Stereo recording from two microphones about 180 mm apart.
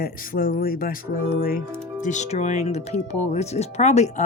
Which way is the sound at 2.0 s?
40° left (ahead or behind).